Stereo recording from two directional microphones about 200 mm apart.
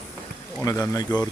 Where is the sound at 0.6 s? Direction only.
15° left (ahead or behind).